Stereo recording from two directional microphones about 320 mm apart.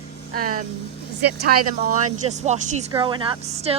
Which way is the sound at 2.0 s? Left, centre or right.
Right.